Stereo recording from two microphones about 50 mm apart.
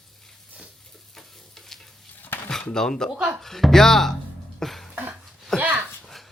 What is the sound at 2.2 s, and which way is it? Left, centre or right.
Dishes, left.